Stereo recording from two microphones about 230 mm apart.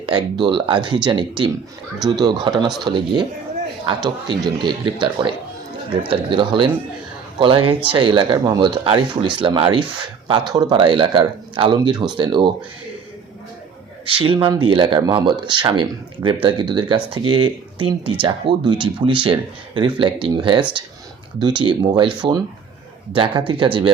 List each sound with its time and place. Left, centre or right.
0.0 s a man's voice: right
14.0 s speech: right
23.1 s speech: right